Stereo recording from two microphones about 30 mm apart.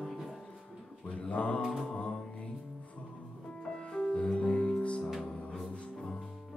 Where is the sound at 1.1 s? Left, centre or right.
Left.